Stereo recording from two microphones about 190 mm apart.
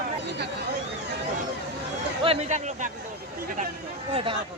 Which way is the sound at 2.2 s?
30° right (ahead or behind).